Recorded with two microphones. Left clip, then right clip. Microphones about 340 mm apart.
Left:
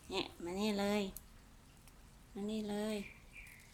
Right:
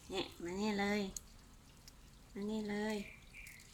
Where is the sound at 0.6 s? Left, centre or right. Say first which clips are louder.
Left 1 dB; centre.